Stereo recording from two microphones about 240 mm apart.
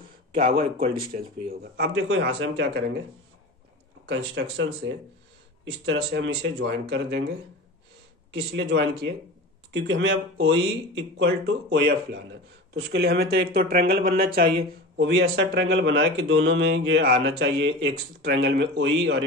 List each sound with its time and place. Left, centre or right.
0.3 s speech: right
4.0 s speech: right
8.4 s speech: right
12.7 s speech: right